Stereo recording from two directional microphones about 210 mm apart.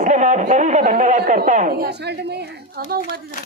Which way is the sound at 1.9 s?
50° right (ahead or behind).